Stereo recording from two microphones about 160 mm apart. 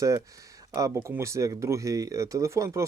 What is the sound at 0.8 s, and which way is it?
Speech, 20° right (ahead or behind).